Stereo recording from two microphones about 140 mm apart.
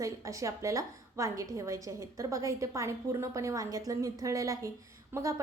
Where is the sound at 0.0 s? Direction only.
20° right (ahead or behind).